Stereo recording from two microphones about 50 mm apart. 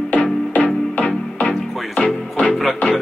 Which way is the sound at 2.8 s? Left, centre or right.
Left.